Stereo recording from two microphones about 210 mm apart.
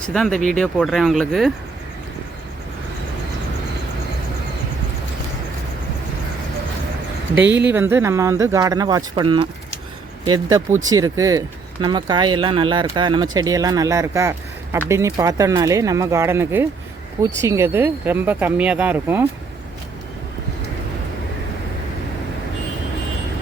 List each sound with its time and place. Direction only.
0.1 s speech: 5° left (ahead or behind)
7.4 s speech: 10° right (ahead or behind)